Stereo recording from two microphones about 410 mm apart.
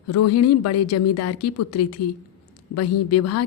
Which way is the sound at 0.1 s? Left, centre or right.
Left.